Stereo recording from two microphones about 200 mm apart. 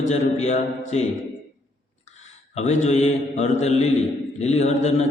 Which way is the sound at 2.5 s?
35° left (ahead or behind).